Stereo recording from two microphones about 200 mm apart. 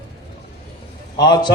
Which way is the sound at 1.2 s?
20° left (ahead or behind).